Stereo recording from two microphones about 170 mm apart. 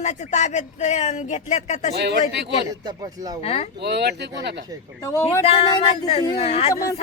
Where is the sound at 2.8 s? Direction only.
20° right (ahead or behind).